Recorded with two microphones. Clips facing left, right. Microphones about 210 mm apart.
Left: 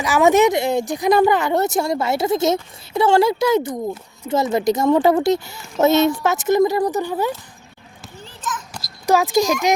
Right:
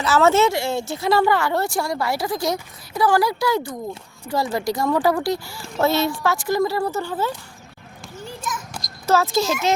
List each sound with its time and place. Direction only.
0.0 s a woman's voice: 15° left (ahead or behind)
8.2 s children playing: 10° right (ahead or behind)
9.0 s a child's voice: 15° left (ahead or behind)